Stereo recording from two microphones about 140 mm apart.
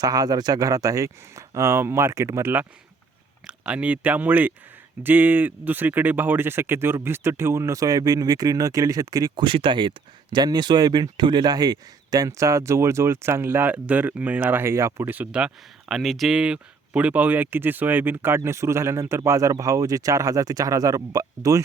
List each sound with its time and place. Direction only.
0.0 s speech: 25° right (ahead or behind)